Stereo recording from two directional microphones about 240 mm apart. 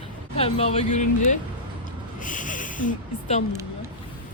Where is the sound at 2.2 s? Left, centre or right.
Left.